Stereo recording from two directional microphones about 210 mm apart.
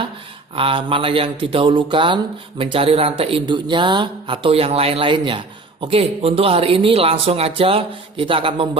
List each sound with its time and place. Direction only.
0.5 s speech: 25° right (ahead or behind)